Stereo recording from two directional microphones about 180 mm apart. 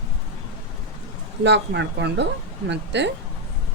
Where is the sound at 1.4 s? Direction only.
75° right (ahead or behind).